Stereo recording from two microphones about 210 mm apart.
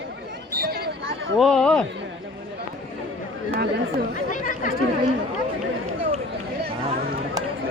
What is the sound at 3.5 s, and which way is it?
Speech, 45° right (ahead or behind).